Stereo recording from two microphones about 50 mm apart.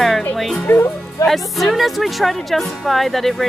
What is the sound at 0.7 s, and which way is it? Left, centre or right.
Speech, left.